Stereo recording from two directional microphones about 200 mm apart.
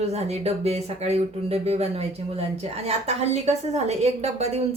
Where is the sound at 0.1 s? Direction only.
30° right (ahead or behind).